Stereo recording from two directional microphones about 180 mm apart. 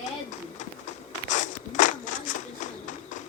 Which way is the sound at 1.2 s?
45° left (ahead or behind).